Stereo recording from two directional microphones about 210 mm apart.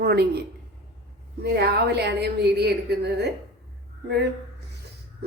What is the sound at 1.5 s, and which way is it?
Speech, 50° right (ahead or behind).